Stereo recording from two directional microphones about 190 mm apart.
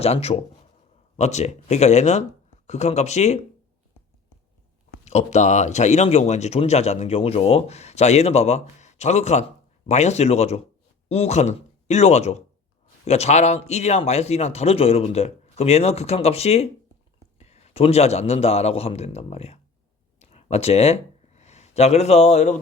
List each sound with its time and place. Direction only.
0.0 s speech: 35° left (ahead or behind)
5.0 s a man's voice: 35° left (ahead or behind)
20.1 s a sound: 35° left (ahead or behind)